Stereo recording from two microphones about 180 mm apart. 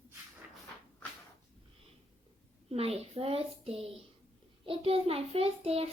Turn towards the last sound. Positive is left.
turn(degrees=-35)  # may be behind; listen again after turning